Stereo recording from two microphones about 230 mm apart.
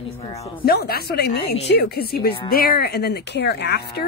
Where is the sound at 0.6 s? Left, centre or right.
Left.